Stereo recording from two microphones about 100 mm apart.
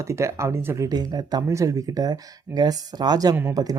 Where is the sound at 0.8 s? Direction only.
45° right (ahead or behind).